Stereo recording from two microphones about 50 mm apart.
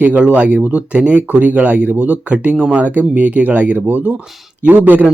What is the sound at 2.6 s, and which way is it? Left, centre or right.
Speech, centre.